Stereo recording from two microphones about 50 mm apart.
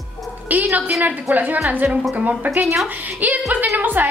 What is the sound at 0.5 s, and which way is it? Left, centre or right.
A woman's voice, right.